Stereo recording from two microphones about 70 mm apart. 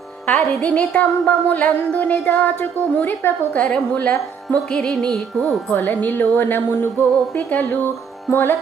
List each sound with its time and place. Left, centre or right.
0.3 s a woman's voice: centre
4.7 s music: centre
5.7 s a woman's voice: left
8.3 s music: left